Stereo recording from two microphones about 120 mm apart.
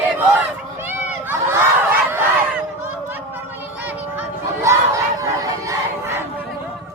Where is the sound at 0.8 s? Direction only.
15° right (ahead or behind).